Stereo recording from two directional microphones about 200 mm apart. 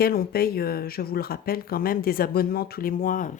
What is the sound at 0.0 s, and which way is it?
Speech, 50° left (ahead or behind).